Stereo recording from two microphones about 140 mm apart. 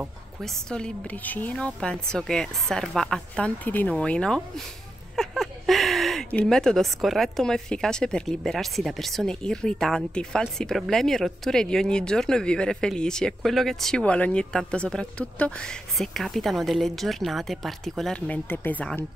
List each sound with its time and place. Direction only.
0.4 s speech: 5° left (ahead or behind)